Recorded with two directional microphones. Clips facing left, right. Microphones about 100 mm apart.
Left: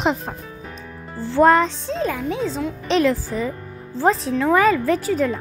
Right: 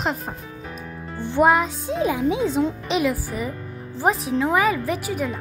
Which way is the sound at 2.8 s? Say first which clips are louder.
Left 4 dB; 10° right (ahead or behind).